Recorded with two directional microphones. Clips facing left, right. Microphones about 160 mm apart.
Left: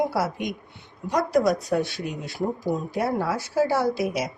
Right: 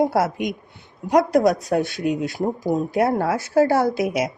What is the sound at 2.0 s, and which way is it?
Speech, 90° right.